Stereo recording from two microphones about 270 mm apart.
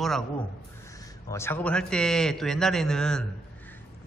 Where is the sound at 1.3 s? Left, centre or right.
Centre.